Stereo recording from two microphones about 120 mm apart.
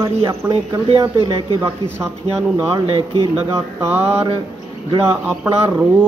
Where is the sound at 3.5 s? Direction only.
20° right (ahead or behind).